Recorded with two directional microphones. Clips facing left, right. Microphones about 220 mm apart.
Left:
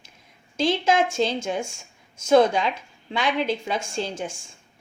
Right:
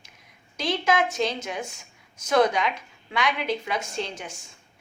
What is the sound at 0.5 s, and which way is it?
Speech, 25° left (ahead or behind).